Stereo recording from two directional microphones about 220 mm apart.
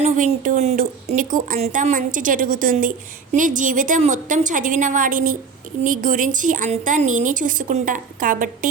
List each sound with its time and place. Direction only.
0.0 s a woman's voice: 35° right (ahead or behind)